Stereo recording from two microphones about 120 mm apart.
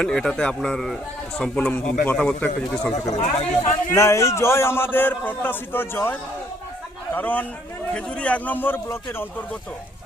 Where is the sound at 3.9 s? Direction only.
25° left (ahead or behind).